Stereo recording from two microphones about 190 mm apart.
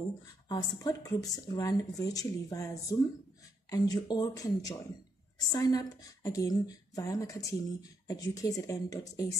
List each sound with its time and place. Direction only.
0.5 s a woman's voice: 20° left (ahead or behind)